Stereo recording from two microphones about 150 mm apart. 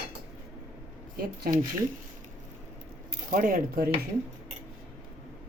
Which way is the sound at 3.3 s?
65° right (ahead or behind).